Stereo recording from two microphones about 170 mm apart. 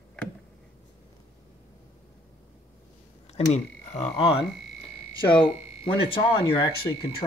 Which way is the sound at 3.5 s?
40° left (ahead or behind).